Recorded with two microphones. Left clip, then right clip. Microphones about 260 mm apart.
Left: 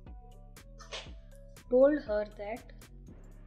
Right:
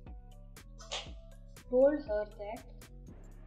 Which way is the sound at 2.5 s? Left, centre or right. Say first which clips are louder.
Left 3 dB; centre.